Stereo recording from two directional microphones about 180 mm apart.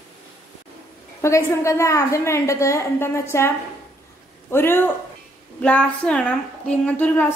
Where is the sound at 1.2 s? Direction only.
15° left (ahead or behind).